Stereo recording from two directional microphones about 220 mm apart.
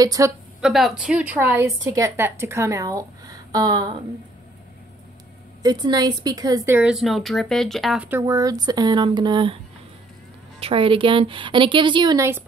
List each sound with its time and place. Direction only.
0.0 s speech: 15° right (ahead or behind)
0.6 s a woman's voice: centre (ahead or behind); by 4.0 s 20° right (ahead or behind)
5.6 s speech: 20° right (ahead or behind)
10.6 s a woman's voice: 25° right (ahead or behind)